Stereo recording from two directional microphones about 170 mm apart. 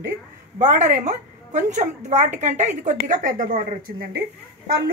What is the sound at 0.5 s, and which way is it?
A woman's voice, 45° right (ahead or behind).